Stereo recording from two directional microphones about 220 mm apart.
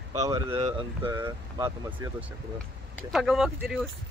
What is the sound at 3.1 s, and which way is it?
Speech, centre (ahead or behind).